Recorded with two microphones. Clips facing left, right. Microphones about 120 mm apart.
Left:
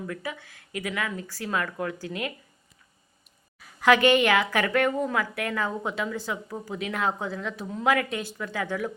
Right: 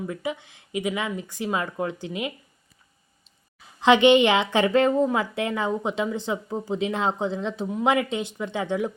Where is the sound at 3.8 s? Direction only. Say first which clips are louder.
Right 3 dB; 20° right (ahead or behind).